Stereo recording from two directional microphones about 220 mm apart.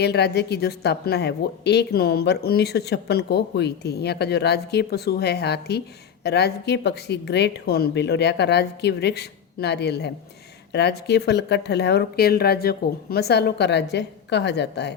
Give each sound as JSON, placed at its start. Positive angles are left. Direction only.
{"t": 0.0, "sound": "a woman's voice", "side_deg": 50}